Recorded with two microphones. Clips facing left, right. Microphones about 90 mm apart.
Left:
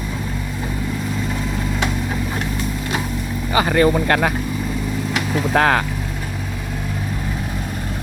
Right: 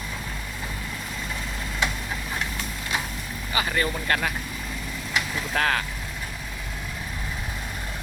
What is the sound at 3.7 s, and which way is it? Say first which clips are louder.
Speech: left 11 dB; 45° left (ahead or behind).